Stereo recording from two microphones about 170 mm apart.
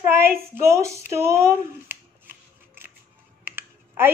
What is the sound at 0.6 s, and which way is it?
Speech, 15° right (ahead or behind).